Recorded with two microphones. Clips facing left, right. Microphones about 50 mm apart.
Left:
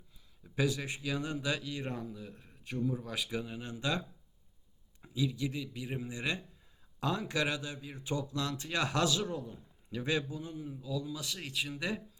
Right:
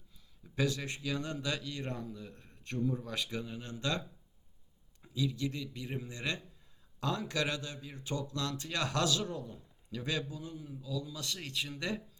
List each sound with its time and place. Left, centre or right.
0.4 s a man's voice: centre
5.0 s a man's voice: centre